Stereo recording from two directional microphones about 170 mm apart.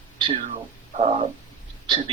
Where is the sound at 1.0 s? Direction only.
35° right (ahead or behind).